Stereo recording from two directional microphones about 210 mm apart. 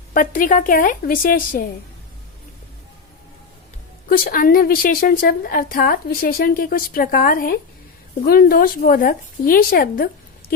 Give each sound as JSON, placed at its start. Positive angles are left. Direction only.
{"t": 0.1, "sound": "speech", "side_deg": 40}
{"t": 4.1, "sound": "a woman's voice", "side_deg": 45}